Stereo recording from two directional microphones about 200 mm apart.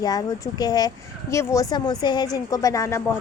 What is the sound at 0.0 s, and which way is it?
Speech, 20° left (ahead or behind).